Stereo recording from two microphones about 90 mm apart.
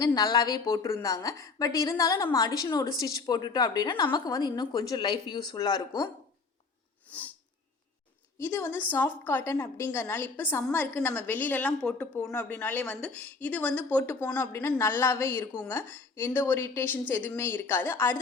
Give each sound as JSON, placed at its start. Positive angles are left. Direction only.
{"t": 0.0, "sound": "a woman's voice", "side_deg": 50}
{"t": 3.9, "sound": "a woman's voice", "side_deg": 55}
{"t": 4.3, "sound": "speech", "side_deg": 45}
{"t": 7.1, "sound": "speech", "side_deg": 15}
{"t": 8.4, "sound": "a woman's voice", "side_deg": 25}
{"t": 9.5, "sound": "a woman's voice", "side_deg": 35}
{"t": 12.5, "sound": "speech", "side_deg": 20}
{"t": 14.3, "sound": "a woman's voice", "side_deg": 30}